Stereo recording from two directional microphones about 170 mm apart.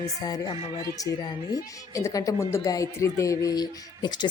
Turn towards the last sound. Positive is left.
turn(degrees=25)  # may be behind; listen again after turning